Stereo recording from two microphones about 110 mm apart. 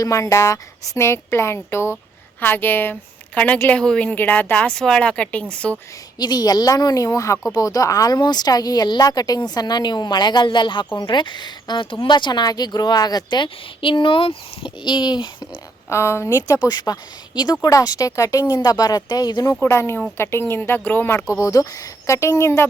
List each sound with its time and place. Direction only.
0.0 s a woman's voice: 30° left (ahead or behind); by 5.7 s 10° left (ahead or behind)
6.1 s speech: 40° left (ahead or behind)
15.9 s speech: 25° left (ahead or behind)
16.6 s speech: 35° left (ahead or behind)
19.6 s speech: 25° left (ahead or behind)